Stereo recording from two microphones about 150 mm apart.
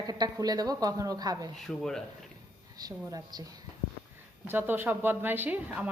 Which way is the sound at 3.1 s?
25° right (ahead or behind).